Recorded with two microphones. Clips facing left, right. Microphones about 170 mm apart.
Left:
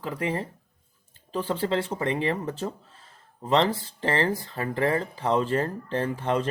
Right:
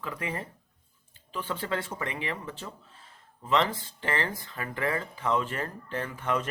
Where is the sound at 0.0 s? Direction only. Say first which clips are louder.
Left 6 dB; 30° left (ahead or behind).